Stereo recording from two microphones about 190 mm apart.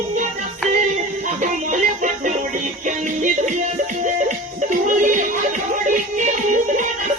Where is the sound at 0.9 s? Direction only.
40° right (ahead or behind).